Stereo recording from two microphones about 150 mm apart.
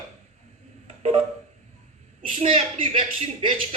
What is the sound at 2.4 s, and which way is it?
Speech, 40° right (ahead or behind).